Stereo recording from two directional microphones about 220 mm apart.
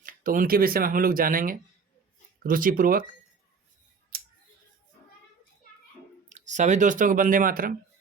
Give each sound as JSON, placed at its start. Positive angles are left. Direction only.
{"t": 0.0, "sound": "speech", "side_deg": -40}
{"t": 4.1, "sound": "scissors", "side_deg": -45}
{"t": 6.2, "sound": "speech", "side_deg": -35}